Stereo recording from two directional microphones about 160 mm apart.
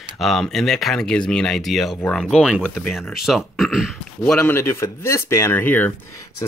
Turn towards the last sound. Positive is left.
turn(degrees=20)  # may be behind; listen again after turning